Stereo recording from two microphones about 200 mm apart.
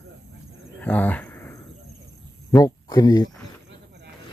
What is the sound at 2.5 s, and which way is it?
Speech, 20° left (ahead or behind).